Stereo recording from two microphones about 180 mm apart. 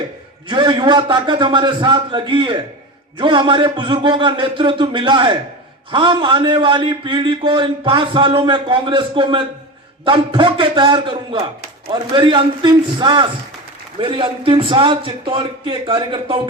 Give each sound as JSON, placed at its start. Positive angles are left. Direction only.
{"t": 0.4, "sound": "a man's voice", "side_deg": -25}